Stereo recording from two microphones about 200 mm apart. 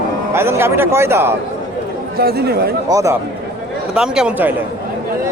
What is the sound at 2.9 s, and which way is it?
Speech, 15° right (ahead or behind).